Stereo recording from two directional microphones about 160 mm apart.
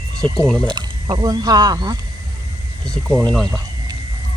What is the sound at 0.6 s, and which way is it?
Speech, 30° right (ahead or behind).